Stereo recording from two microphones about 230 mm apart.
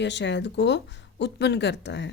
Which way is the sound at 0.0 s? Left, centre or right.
Left.